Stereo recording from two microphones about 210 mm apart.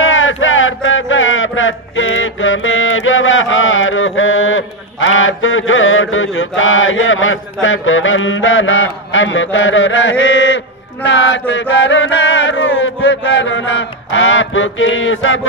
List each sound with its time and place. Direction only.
0.0 s a sound: 70° left (ahead or behind)
11.1 s male singing: 60° left (ahead or behind)
11.8 s chant: 60° left (ahead or behind)